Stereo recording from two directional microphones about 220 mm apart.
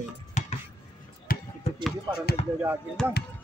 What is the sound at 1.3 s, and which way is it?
Basketball bounce, 40° left (ahead or behind).